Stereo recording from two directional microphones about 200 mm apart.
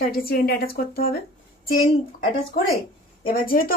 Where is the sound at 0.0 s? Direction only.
50° left (ahead or behind).